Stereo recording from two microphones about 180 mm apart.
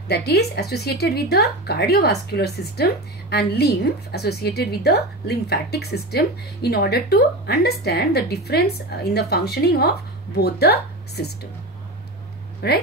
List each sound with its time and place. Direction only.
0.1 s a woman's voice: 65° left (ahead or behind)
12.6 s speech: 65° left (ahead or behind)